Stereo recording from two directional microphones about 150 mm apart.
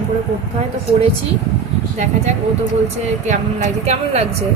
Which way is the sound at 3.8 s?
45° right (ahead or behind).